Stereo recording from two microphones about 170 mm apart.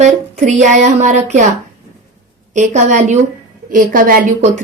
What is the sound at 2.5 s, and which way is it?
A woman's voice, 45° right (ahead or behind).